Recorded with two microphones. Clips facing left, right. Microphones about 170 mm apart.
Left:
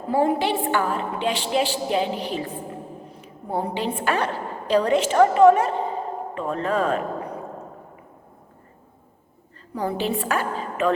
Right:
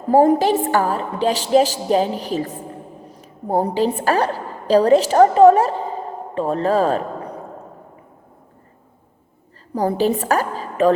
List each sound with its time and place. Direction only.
0.1 s a woman's voice: 40° right (ahead or behind)
9.7 s a woman's voice: 40° right (ahead or behind)